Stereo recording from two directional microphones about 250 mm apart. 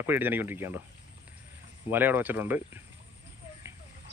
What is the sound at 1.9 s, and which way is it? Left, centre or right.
Speech, centre.